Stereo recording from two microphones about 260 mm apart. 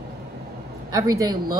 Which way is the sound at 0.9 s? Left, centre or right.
Centre.